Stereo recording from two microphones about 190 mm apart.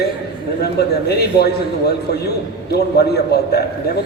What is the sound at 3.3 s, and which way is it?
Speech, 60° left (ahead or behind).